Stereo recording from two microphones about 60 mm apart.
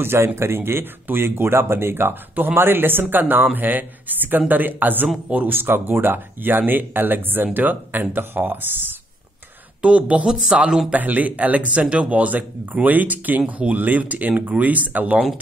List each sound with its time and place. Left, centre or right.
0.0 s speech: right
9.8 s speech: right
10.9 s speech: right